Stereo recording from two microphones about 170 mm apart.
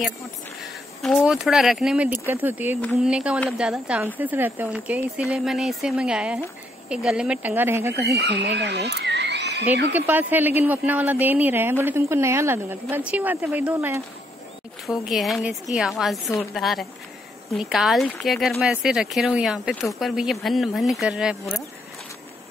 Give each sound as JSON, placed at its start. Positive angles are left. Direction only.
{"t": 0.6, "sound": "a woman's voice", "side_deg": 0}
{"t": 8.1, "sound": "speech", "side_deg": -80}
{"t": 9.9, "sound": "a woman's voice", "side_deg": -10}
{"t": 14.9, "sound": "speech", "side_deg": 0}